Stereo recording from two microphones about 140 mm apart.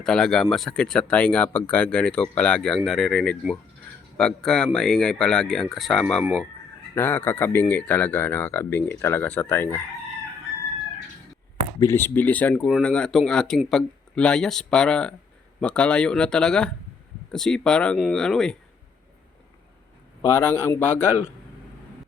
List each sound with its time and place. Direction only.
0.0 s speech: 5° left (ahead or behind)
11.8 s speech: 15° left (ahead or behind)
20.2 s speech: 15° left (ahead or behind)